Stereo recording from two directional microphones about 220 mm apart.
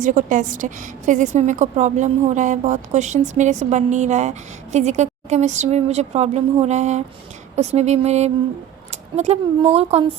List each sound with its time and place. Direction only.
0.0 s a woman's voice: 35° right (ahead or behind)